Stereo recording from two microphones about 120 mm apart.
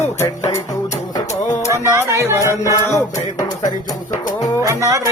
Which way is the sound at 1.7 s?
25° right (ahead or behind).